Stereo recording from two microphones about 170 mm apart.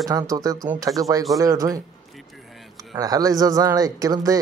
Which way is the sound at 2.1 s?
Centre (ahead or behind).